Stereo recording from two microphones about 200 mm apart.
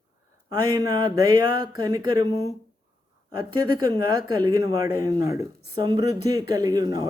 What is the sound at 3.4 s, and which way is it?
Speech, 20° right (ahead or behind).